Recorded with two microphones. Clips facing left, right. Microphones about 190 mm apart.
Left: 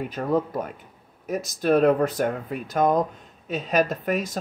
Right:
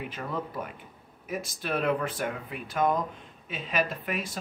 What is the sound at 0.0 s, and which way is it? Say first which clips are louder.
Speech: left 10 dB; 40° left (ahead or behind).